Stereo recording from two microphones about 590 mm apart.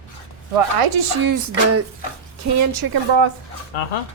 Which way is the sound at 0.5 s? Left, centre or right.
Right.